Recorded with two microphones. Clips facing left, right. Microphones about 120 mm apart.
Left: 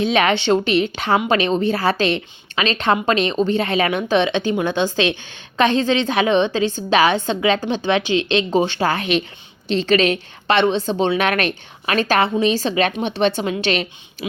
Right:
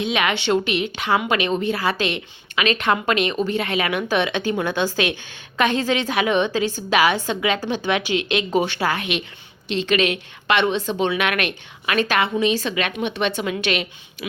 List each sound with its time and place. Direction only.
0.0 s a woman's voice: 35° left (ahead or behind)